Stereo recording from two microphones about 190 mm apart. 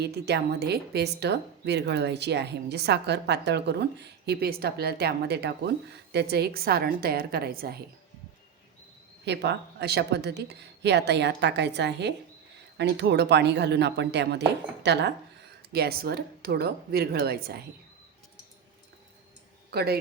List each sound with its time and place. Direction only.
0.0 s a woman's voice: 60° right (ahead or behind)
9.2 s a woman's voice: 60° right (ahead or behind)
19.7 s a woman's voice: 55° right (ahead or behind)